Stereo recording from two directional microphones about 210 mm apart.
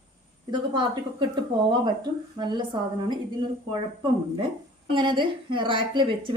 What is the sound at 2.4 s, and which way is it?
A woman's voice, 20° right (ahead or behind).